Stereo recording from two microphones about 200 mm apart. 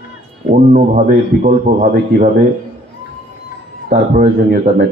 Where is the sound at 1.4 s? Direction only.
40° right (ahead or behind).